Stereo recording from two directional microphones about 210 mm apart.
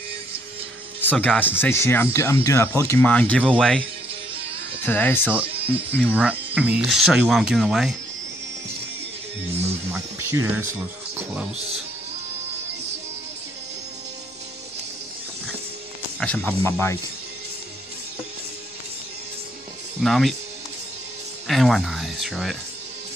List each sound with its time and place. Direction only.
1.0 s speech: 5° left (ahead or behind)
4.8 s speech: 10° left (ahead or behind)
6.1 s speech: 5° right (ahead or behind)
9.9 s speech: 10° right (ahead or behind)
11.5 s speech: 30° right (ahead or behind)
16.2 s speech: 5° left (ahead or behind)
20.0 s speech: centre (ahead or behind)
21.5 s speech: centre (ahead or behind)